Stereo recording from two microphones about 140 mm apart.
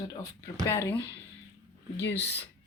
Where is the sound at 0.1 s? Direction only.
25° left (ahead or behind).